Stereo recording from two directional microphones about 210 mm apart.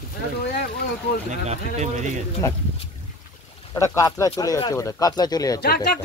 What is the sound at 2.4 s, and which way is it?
Speech, 15° left (ahead or behind).